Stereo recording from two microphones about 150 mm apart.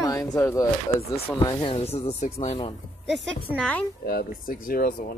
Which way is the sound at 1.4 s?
30° left (ahead or behind).